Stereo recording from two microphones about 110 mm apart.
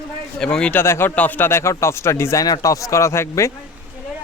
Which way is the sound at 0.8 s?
20° left (ahead or behind).